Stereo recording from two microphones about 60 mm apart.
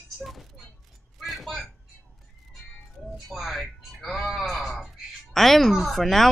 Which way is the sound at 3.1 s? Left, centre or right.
Centre.